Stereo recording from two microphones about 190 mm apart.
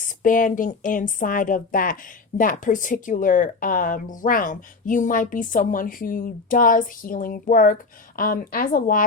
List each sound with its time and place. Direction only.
0.0 s speech: 45° left (ahead or behind)